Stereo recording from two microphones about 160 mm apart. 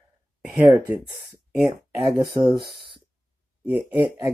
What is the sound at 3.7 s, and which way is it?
Speech, 30° right (ahead or behind).